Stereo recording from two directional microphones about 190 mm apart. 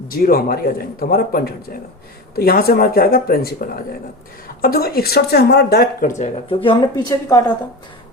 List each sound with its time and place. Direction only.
0.1 s a woman's voice: 50° left (ahead or behind); by 7.5 s 15° left (ahead or behind)